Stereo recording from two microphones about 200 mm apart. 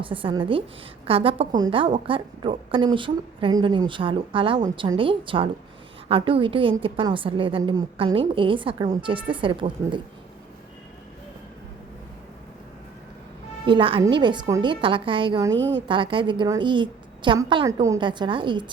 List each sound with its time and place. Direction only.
0.0 s a woman's voice: 25° right (ahead or behind)
13.7 s a woman's voice: 25° right (ahead or behind)
15.5 s a woman's voice: 65° right (ahead or behind)
15.9 s a woman's voice: 25° right (ahead or behind)